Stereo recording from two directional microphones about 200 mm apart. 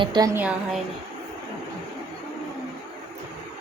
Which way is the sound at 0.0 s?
20° right (ahead or behind).